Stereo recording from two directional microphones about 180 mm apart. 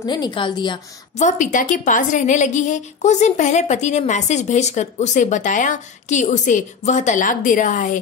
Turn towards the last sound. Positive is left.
turn(degrees=45)  # may be behind; listen again after turning